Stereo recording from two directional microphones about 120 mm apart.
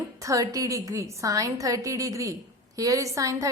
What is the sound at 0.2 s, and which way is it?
A woman's voice, 30° right (ahead or behind).